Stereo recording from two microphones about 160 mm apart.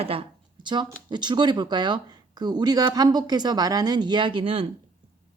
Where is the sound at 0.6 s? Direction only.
30° right (ahead or behind).